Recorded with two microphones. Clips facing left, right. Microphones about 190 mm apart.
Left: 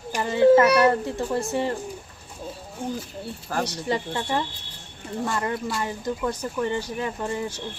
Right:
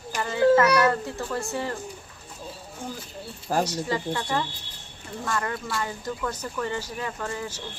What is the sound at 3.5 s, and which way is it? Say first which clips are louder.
Speech: right 3 dB; 25° right (ahead or behind).